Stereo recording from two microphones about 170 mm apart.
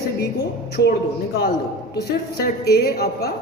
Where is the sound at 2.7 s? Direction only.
70° left (ahead or behind).